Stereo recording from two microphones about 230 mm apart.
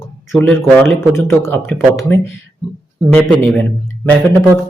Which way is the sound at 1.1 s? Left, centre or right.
Centre.